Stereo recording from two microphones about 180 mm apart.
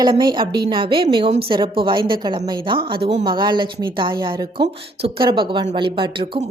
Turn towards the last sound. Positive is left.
turn(degrees=-25)  # may be behind; listen again after turning